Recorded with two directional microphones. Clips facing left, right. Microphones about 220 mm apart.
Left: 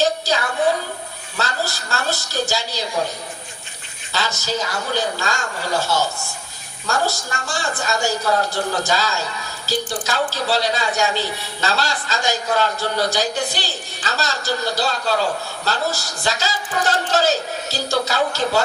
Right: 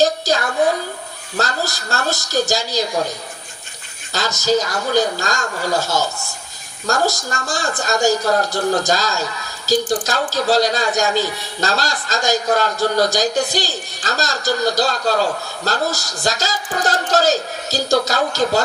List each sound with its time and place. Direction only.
0.0 s a sound: 40° right (ahead or behind)
1.4 s speech: 40° right (ahead or behind)
4.1 s a man's voice: 40° right (ahead or behind)